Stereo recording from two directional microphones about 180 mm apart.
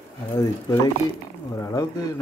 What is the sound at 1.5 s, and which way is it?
Speech, 15° left (ahead or behind).